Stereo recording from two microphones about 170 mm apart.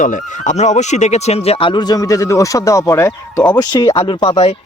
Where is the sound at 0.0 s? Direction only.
45° left (ahead or behind); by 3.6 s 15° left (ahead or behind).